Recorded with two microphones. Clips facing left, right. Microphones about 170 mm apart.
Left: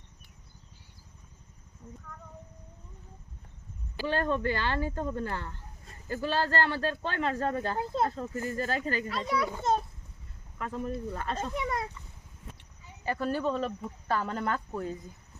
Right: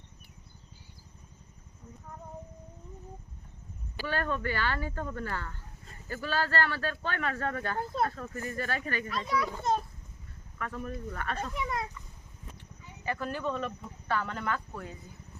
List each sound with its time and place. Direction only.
4.0 s speech: 25° left (ahead or behind)
10.6 s speech: 25° left (ahead or behind)
13.1 s speech: 35° left (ahead or behind)